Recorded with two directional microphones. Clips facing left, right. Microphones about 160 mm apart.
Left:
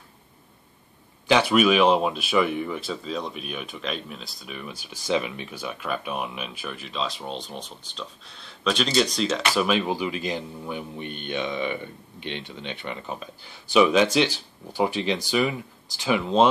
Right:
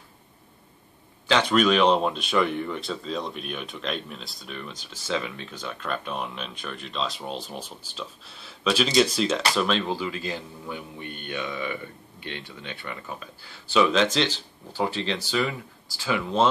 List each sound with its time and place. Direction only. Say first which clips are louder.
1.2 s speech: left 2 dB; 10° left (ahead or behind); by 9.4 s 5° right (ahead or behind)
9.6 s a man's voice: left 2 dB; 10° left (ahead or behind)